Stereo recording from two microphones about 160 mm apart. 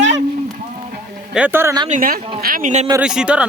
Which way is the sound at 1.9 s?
55° right (ahead or behind).